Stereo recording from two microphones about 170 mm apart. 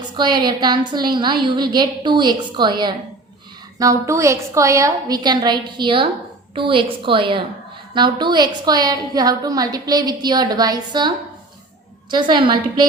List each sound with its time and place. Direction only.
0.2 s a woman's voice: 25° right (ahead or behind)
12.1 s a woman's voice: 25° right (ahead or behind)